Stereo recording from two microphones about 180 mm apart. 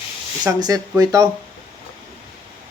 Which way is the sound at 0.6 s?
20° right (ahead or behind).